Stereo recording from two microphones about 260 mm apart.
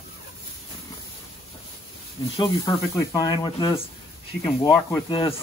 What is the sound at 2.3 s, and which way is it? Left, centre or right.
Speech, centre.